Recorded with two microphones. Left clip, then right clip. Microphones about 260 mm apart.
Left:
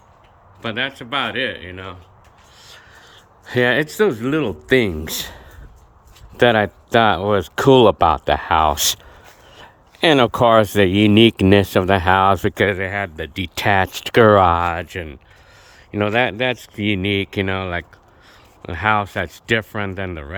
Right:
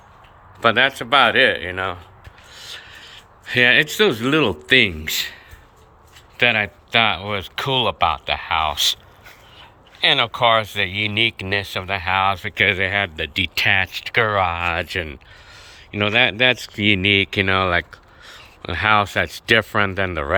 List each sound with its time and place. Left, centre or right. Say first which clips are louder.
0.6 s speech: right 8 dB; centre
2.6 s filing: right 8 dB; centre
3.0 s speech: right 4 dB; left
12.7 s speech: right 3 dB; centre; by 14.6 s left
14.6 s speech: even; centre